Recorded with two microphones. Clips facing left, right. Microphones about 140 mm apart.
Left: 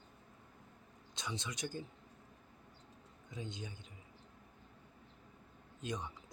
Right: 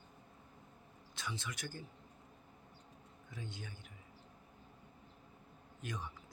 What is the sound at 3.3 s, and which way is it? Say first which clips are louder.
Speech: left 3 dB; 20° left (ahead or behind).